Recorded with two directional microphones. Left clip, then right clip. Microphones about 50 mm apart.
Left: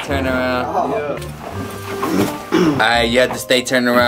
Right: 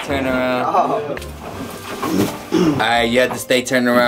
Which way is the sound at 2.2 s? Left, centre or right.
Left.